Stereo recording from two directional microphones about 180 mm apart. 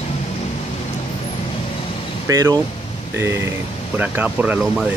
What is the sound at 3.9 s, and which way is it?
Speech, 10° right (ahead or behind).